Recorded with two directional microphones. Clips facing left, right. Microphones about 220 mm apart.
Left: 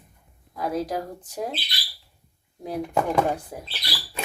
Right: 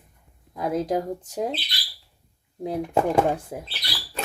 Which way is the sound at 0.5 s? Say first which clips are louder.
Right 3 dB; 25° right (ahead or behind).